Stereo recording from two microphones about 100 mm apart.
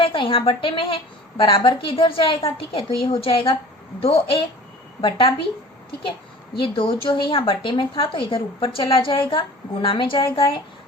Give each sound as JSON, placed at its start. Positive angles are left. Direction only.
{"t": 0.0, "sound": "speech", "side_deg": 60}
{"t": 4.0, "sound": "speech", "side_deg": 75}
{"t": 4.9, "sound": "speech", "side_deg": 55}
{"t": 6.6, "sound": "speech", "side_deg": 65}